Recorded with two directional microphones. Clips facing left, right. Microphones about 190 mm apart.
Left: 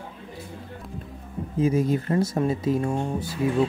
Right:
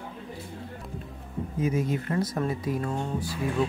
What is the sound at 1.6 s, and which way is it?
A man's voice, 30° left (ahead or behind).